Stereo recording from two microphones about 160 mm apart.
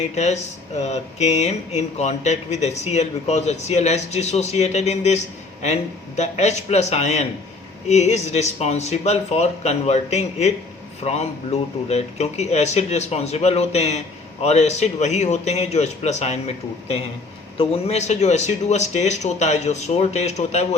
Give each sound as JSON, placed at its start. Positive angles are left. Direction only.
{"t": 0.8, "sound": "speech", "side_deg": 45}